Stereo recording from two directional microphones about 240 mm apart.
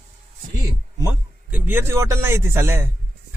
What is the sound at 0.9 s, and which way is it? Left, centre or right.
Speech, centre.